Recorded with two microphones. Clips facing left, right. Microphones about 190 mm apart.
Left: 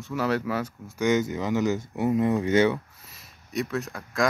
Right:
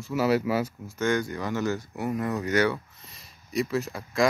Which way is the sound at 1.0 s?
20° left (ahead or behind).